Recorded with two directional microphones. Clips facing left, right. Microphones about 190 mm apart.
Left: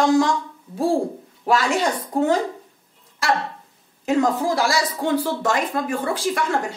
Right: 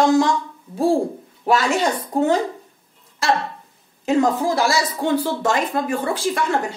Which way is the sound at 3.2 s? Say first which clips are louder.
Right 2 dB; 25° right (ahead or behind).